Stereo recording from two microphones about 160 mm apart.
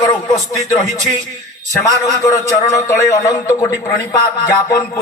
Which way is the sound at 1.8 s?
20° left (ahead or behind).